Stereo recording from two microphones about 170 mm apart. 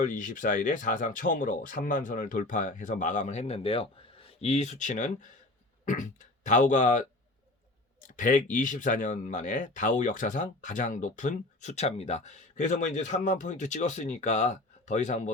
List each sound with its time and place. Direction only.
0.0 s speech: 50° left (ahead or behind)